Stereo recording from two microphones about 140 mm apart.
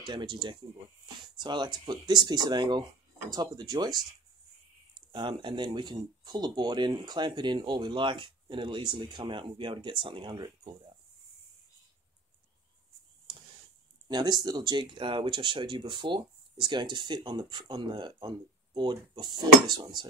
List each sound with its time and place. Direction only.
0.0 s speech: 35° right (ahead or behind)
5.1 s speech: 35° right (ahead or behind)
14.0 s speech: 30° right (ahead or behind)